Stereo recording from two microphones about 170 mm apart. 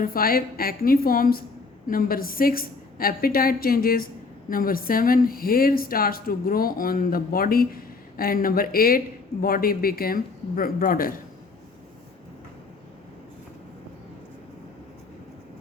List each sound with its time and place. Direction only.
0.0 s a woman's voice: 60° left (ahead or behind)